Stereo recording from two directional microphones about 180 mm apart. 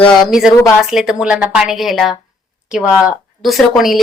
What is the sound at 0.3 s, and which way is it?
A woman's voice, 5° right (ahead or behind).